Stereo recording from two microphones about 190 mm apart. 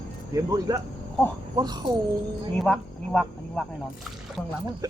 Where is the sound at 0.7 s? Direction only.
20° right (ahead or behind).